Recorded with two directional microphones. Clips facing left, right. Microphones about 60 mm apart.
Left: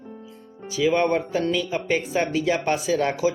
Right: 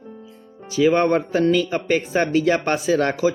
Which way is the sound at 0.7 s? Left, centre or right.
Right.